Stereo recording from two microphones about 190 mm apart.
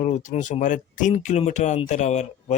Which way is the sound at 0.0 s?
40° left (ahead or behind).